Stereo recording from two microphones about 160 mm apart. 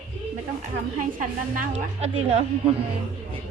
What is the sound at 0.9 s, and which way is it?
A woman's voice, 55° right (ahead or behind).